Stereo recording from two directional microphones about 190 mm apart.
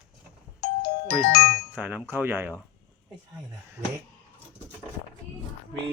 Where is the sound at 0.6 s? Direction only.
55° left (ahead or behind).